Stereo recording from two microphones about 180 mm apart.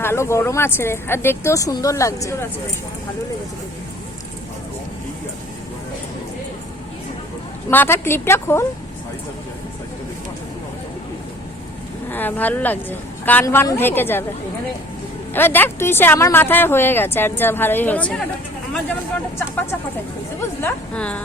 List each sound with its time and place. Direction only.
0.0 s speech: 15° left (ahead or behind)
7.7 s speech: 10° left (ahead or behind)
12.1 s speech: 10° left (ahead or behind)
15.3 s speech: 10° left (ahead or behind)
20.6 s speech: 10° left (ahead or behind)